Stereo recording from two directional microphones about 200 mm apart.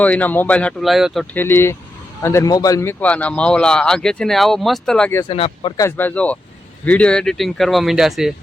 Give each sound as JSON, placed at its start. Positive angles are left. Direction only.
{"t": 0.0, "sound": "speech", "side_deg": 10}
{"t": 3.0, "sound": "speech", "side_deg": 5}
{"t": 5.3, "sound": "speech", "side_deg": 30}
{"t": 5.7, "sound": "speech", "side_deg": 10}